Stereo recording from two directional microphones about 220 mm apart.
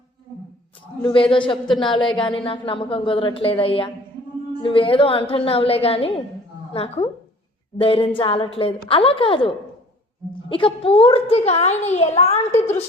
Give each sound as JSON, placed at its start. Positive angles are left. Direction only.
{"t": 1.0, "sound": "a child's voice", "side_deg": 25}
{"t": 10.5, "sound": "a child's voice", "side_deg": 25}